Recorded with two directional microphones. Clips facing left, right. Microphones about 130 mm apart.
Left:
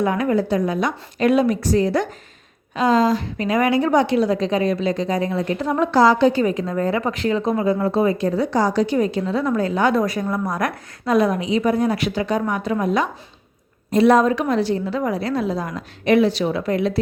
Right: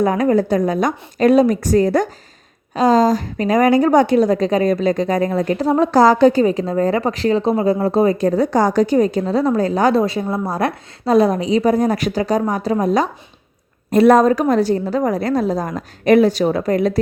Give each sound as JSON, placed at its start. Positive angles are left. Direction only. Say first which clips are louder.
{"t": 0.0, "sound": "a woman's voice", "louder": "right 4 dB", "side_deg": -40}
{"t": 6.4, "sound": "speech", "louder": "right 4 dB", "side_deg": -35}
{"t": 10.0, "sound": "speech", "louder": "right 3 dB", "side_deg": -25}
{"t": 13.9, "sound": "a woman's voice", "louder": "right 4 dB", "side_deg": -50}